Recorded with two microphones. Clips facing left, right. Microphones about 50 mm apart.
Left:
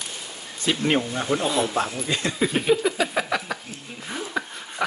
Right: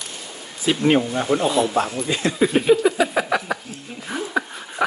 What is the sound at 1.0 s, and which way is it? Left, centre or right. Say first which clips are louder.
Speech: right 4 dB; right.